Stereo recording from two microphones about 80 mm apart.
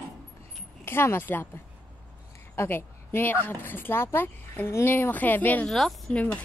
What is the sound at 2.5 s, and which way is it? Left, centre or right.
A woman's voice, left.